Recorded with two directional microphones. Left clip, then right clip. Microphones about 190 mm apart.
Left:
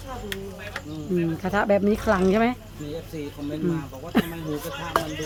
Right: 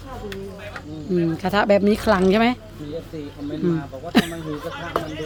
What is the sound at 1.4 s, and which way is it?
Speech, 10° right (ahead or behind).